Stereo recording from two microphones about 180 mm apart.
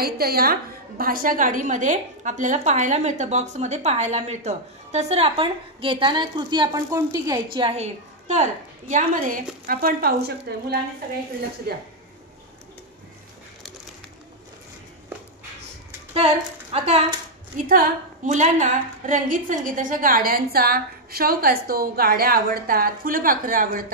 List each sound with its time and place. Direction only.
0.0 s a woman's voice: 55° right (ahead or behind)
16.7 s a woman's voice: 35° right (ahead or behind)
17.6 s a woman's voice: 50° right (ahead or behind)